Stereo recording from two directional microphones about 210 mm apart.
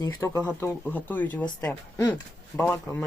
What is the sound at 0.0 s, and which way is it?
Speech, 15° left (ahead or behind).